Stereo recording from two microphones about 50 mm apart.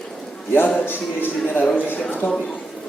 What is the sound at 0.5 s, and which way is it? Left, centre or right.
A man's voice, left.